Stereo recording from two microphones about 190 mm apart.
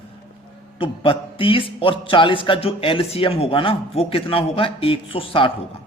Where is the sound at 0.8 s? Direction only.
25° left (ahead or behind).